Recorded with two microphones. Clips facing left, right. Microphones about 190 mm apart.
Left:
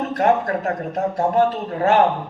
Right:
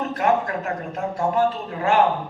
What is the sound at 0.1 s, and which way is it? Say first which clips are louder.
A man's voice: left 4 dB; 40° left (ahead or behind).